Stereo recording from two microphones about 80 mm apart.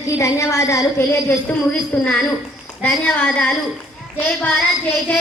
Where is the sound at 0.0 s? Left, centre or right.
Left.